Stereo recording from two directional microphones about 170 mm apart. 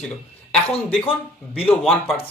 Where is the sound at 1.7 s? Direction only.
5° left (ahead or behind).